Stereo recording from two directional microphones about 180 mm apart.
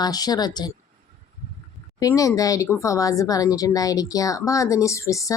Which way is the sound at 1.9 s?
20° left (ahead or behind).